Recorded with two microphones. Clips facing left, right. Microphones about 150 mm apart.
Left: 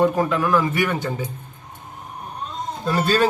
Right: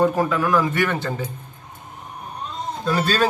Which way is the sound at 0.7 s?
10° left (ahead or behind).